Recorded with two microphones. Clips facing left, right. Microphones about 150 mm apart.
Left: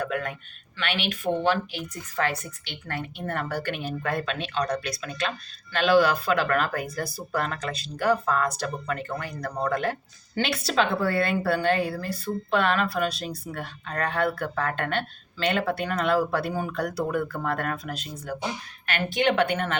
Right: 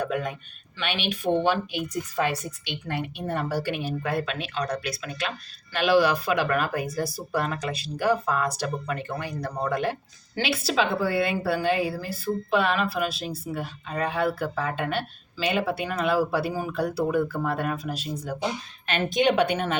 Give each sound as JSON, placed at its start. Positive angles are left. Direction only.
{"t": 0.0, "sound": "a woman's voice", "side_deg": -15}